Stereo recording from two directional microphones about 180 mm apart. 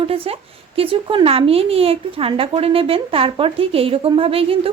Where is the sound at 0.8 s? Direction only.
30° right (ahead or behind).